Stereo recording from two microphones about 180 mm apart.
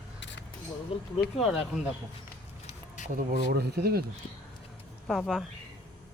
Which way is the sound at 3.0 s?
45° left (ahead or behind).